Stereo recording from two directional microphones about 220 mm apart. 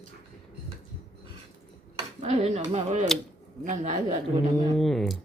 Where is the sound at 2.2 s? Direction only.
30° right (ahead or behind).